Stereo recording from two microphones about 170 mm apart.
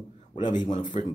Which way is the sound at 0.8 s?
45° left (ahead or behind).